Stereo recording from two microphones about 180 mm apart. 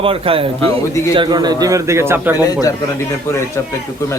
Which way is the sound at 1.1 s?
25° right (ahead or behind).